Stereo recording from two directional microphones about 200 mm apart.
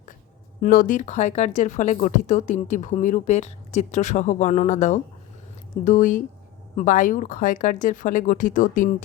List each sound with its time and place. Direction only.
0.6 s speech: 45° left (ahead or behind)